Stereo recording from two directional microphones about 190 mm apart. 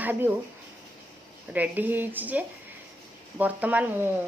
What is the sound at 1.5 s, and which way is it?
A woman's voice, 10° right (ahead or behind).